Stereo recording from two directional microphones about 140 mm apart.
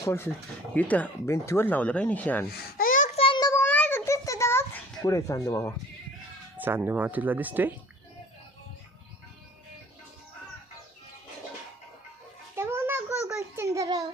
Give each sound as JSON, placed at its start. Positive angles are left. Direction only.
{"t": 0.0, "sound": "speech", "side_deg": 20}
{"t": 2.5, "sound": "babbling", "side_deg": 90}
{"t": 3.2, "sound": "child singing", "side_deg": 35}
{"t": 3.5, "sound": "a sound", "side_deg": 15}
{"t": 6.6, "sound": "speech", "side_deg": -15}
{"t": 12.5, "sound": "child singing", "side_deg": -15}